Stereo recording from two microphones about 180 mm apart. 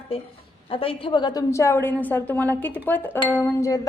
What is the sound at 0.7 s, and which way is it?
A woman's voice, 30° left (ahead or behind).